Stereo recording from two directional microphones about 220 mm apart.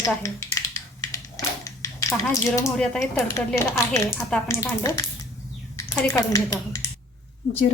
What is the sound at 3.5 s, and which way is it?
Speech, 10° left (ahead or behind).